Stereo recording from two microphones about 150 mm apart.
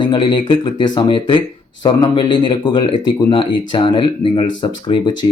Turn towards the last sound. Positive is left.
turn(degrees=35)  # may be behind; listen again after turning